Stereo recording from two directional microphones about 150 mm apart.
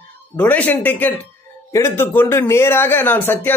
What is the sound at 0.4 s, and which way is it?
A man's voice, 10° left (ahead or behind).